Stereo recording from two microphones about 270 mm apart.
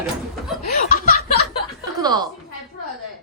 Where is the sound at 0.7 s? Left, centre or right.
Left.